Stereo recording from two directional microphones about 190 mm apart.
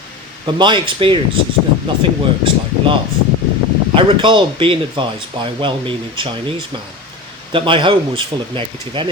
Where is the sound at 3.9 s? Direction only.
25° right (ahead or behind).